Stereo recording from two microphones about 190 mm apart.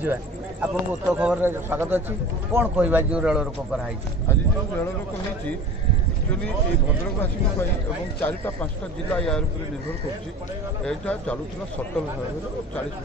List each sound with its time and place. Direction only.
0.0 s speech: 10° right (ahead or behind)
8.2 s a man's voice: 10° left (ahead or behind)
10.9 s speech: 5° left (ahead or behind)